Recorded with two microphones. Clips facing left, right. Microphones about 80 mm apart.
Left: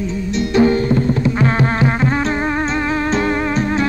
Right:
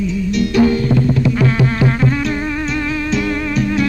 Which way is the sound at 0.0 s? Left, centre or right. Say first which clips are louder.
Right 3 dB; left.